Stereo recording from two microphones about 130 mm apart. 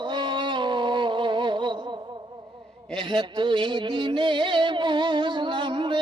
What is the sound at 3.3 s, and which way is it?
Music, 40° right (ahead or behind).